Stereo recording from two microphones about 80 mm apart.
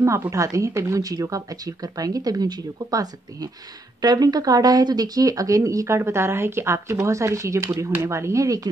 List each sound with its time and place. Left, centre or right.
0.0 s a woman's voice: right